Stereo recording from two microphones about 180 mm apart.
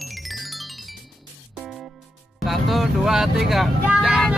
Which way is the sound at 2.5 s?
Centre (ahead or behind).